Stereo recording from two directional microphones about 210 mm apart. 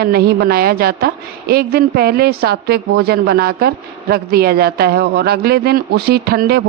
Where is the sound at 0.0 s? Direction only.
50° right (ahead or behind).